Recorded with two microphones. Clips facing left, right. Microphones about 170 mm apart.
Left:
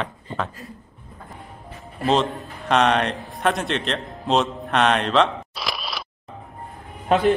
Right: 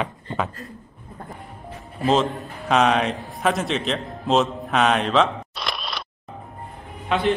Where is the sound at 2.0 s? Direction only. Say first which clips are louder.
Right 1 dB; centre (ahead or behind).